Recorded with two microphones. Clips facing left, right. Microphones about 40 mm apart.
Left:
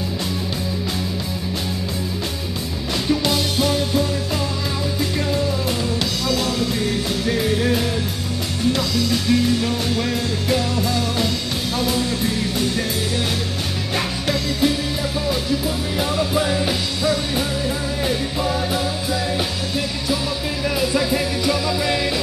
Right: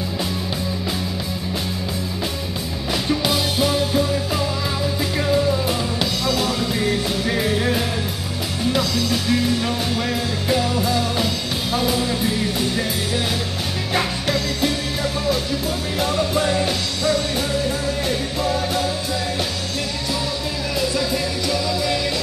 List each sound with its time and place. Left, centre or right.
3.1 s music: centre
6.2 s music: centre
13.9 s music: centre
16.0 s music: centre
20.8 s music: centre